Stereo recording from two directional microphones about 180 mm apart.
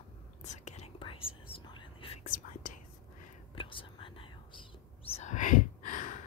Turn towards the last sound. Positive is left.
turn(degrees=45)  # may be behind; listen again after turning